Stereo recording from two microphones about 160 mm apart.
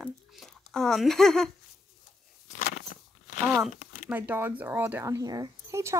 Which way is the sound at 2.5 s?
60° left (ahead or behind).